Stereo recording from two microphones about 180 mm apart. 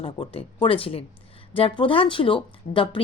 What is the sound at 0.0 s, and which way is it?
Speech, 30° left (ahead or behind).